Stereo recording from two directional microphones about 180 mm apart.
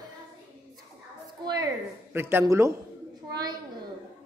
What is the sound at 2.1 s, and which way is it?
Music, 15° right (ahead or behind).